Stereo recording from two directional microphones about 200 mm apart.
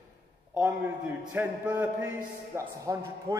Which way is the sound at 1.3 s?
10° right (ahead or behind).